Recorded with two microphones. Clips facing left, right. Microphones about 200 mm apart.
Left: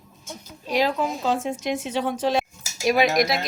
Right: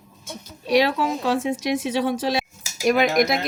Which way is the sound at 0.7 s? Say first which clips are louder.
Right 3 dB; 75° right (ahead or behind).